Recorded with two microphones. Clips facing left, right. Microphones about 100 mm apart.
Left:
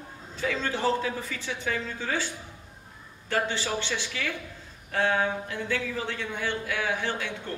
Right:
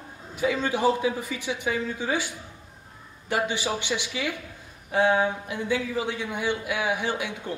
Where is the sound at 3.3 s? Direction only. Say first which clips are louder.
Right 2 dB; 15° right (ahead or behind).